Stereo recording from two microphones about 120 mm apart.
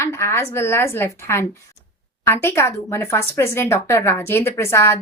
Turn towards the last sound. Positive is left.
turn(degrees=20)  # may be behind; listen again after turning